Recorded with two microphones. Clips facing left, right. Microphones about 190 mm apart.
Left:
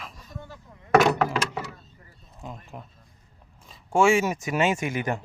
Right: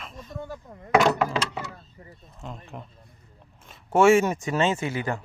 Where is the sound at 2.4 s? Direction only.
10° left (ahead or behind).